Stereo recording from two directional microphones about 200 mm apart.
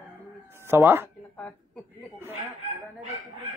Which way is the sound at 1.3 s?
5° left (ahead or behind).